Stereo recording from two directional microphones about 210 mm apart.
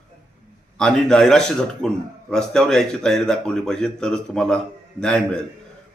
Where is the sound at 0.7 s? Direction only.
5° left (ahead or behind).